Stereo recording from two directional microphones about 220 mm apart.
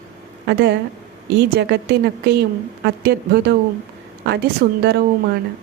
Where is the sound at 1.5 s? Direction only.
45° right (ahead or behind).